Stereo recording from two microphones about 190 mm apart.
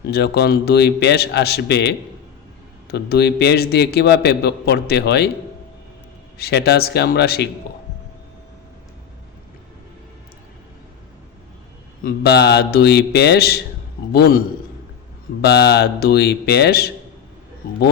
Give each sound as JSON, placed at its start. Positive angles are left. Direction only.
{"t": 0.1, "sound": "a man's voice", "side_deg": 60}
{"t": 6.3, "sound": "a man's voice", "side_deg": 60}
{"t": 12.0, "sound": "a man's voice", "side_deg": 60}